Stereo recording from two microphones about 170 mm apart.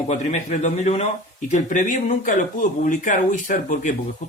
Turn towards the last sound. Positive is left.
turn(degrees=50)  # may be behind; listen again after turning